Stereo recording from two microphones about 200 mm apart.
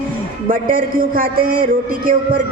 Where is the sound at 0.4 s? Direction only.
45° right (ahead or behind).